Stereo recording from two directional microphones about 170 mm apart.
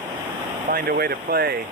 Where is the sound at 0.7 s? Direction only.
65° right (ahead or behind).